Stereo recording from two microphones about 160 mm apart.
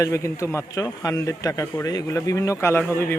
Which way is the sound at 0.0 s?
20° left (ahead or behind).